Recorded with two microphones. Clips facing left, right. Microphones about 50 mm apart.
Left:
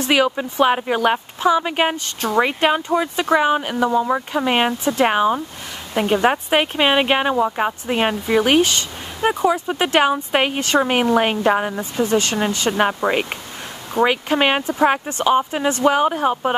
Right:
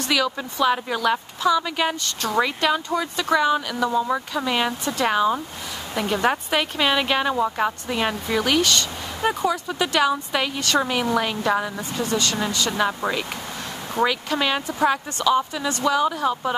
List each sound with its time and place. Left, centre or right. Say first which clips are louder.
0.1 s a woman's voice: left 6 dB; left
7.3 s speech: left 4 dB; centre
7.9 s speech: left 5 dB; left
9.5 s a woman's voice: left 5 dB; left
10.6 s speech: left 4 dB; left
10.9 s a woman's voice: left 6 dB; left
14.0 s a woman's voice: left 5 dB; left